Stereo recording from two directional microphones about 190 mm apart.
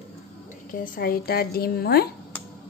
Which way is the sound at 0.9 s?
55° left (ahead or behind).